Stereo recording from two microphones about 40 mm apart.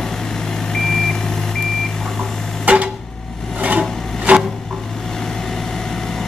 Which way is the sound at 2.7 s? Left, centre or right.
Right.